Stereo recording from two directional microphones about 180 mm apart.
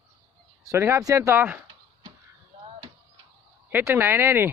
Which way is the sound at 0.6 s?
15° right (ahead or behind).